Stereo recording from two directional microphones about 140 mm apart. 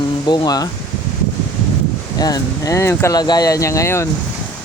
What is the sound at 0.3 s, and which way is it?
Speech, 25° left (ahead or behind).